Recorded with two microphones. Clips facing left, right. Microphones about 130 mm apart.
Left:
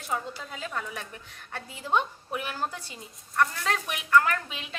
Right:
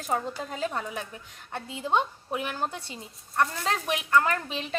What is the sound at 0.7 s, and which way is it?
Speech, 20° right (ahead or behind).